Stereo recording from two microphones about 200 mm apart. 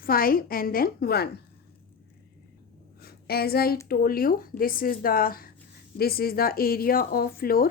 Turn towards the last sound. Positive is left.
turn(degrees=50)  # may be behind; listen again after turning